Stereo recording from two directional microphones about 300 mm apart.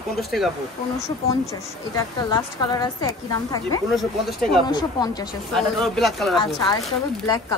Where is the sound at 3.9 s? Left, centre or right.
Centre.